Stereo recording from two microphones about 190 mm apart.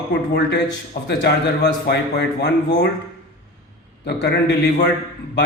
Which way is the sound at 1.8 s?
60° left (ahead or behind).